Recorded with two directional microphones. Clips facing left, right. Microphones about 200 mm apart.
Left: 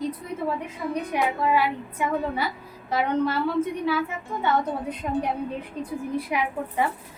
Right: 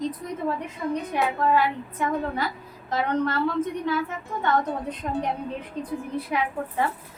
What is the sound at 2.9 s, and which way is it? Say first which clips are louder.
A woman's voice: left 1 dB; 10° left (ahead or behind).